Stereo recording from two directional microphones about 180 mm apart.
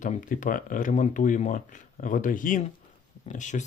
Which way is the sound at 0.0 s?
45° left (ahead or behind).